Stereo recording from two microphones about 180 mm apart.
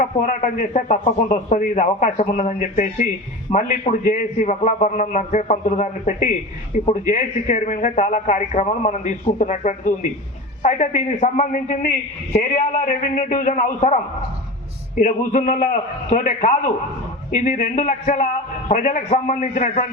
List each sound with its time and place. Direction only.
0.0 s a man's voice: 45° left (ahead or behind)